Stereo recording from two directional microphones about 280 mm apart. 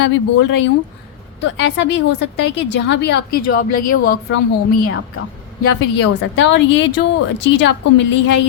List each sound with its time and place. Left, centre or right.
0.0 s a woman's voice: left
6.0 s a woman's voice: left